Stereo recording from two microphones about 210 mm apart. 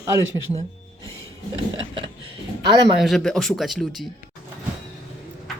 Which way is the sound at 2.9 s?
Centre (ahead or behind).